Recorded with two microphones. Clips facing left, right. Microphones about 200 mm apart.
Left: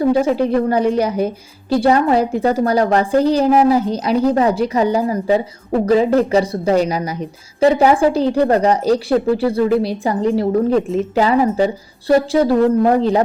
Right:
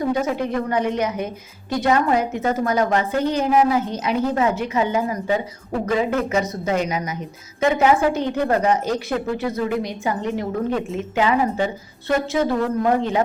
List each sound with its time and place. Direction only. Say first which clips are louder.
0.0 s a woman's voice: left 7 dB; 30° left (ahead or behind)